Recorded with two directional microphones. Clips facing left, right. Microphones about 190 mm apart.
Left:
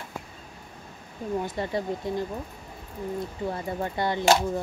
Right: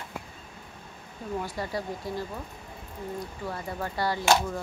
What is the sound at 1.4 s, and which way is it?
Speech, 20° left (ahead or behind).